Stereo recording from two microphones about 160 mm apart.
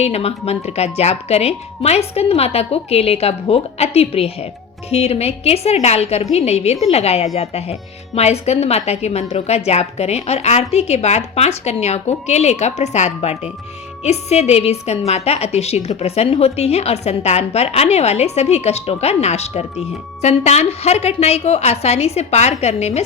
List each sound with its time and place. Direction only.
0.0 s a woman's voice: 40° left (ahead or behind)